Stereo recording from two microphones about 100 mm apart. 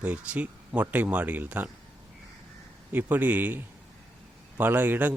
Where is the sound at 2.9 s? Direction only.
15° right (ahead or behind).